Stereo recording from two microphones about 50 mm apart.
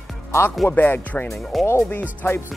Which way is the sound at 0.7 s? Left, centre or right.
Left.